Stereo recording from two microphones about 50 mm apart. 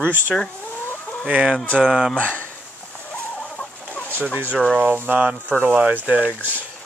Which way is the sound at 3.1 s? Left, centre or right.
Left.